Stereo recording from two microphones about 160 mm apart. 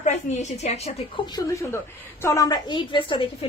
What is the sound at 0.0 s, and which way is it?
A woman's voice, 45° left (ahead or behind).